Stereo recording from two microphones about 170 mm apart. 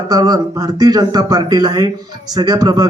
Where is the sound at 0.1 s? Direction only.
20° right (ahead or behind).